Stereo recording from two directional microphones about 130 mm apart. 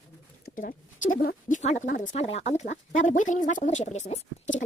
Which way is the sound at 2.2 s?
50° left (ahead or behind).